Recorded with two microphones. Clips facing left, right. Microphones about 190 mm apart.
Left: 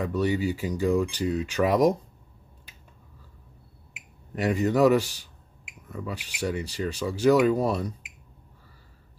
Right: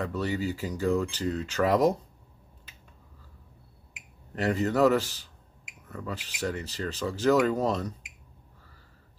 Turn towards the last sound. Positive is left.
turn(degrees=10)  # may be behind; listen again after turning